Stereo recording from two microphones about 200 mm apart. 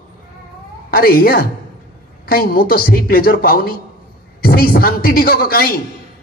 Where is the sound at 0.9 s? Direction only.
50° left (ahead or behind).